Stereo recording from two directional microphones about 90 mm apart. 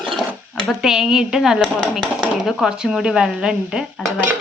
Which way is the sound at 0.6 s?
Centre (ahead or behind).